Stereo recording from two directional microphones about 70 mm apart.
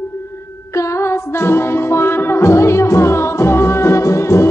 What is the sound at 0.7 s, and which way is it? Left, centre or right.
Music, left.